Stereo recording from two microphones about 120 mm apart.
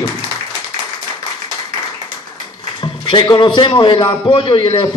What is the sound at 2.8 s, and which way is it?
Speech, 40° left (ahead or behind).